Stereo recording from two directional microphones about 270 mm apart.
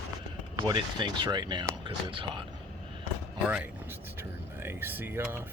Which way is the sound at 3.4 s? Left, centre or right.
Centre.